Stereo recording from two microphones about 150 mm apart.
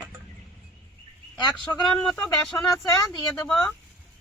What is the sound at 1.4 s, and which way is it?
Speech, 30° left (ahead or behind).